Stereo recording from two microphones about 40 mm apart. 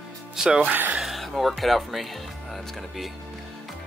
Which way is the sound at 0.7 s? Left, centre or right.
Right.